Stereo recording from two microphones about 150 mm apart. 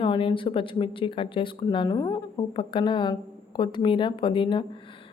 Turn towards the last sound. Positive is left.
turn(degrees=30)  # may be behind; listen again after turning